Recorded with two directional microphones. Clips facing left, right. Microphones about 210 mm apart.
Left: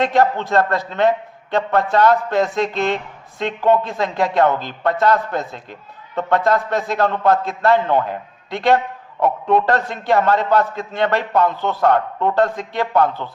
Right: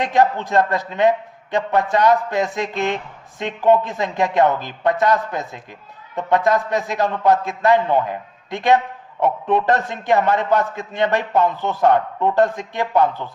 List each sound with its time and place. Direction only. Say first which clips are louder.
0.0 s a man's voice: left 1 dB; 15° right (ahead or behind)